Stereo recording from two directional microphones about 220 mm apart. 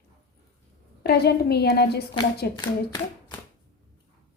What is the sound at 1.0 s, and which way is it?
Speech, 45° left (ahead or behind).